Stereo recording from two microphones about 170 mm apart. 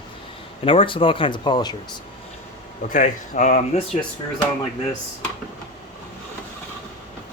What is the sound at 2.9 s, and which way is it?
Speech, 45° left (ahead or behind).